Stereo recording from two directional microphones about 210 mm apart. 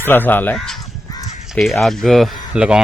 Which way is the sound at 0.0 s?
10° left (ahead or behind).